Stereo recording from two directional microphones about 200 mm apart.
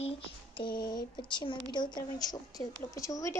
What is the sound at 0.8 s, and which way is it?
A woman's voice, 20° left (ahead or behind).